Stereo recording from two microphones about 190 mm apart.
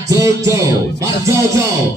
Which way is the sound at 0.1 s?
15° right (ahead or behind).